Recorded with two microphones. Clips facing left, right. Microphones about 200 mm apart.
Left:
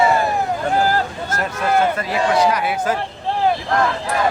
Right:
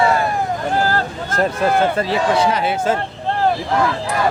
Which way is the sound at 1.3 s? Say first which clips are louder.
Right 3 dB; 30° right (ahead or behind).